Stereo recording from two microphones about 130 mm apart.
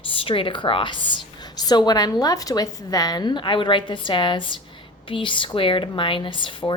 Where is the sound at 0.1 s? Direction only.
45° left (ahead or behind).